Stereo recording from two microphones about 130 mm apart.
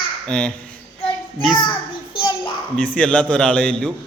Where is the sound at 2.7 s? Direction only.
10° left (ahead or behind).